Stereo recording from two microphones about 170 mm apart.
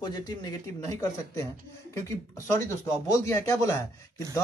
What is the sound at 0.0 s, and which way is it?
Speech, 20° left (ahead or behind).